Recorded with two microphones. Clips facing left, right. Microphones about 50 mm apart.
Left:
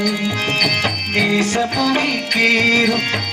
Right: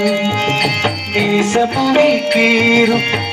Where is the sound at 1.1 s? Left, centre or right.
Centre.